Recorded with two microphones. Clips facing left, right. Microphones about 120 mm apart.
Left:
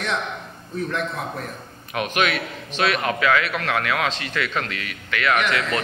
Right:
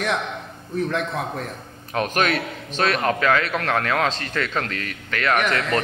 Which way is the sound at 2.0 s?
40° right (ahead or behind).